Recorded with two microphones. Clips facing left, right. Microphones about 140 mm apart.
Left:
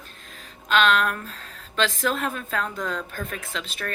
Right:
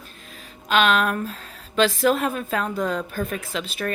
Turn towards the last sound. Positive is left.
turn(degrees=-10)  # may be behind; listen again after turning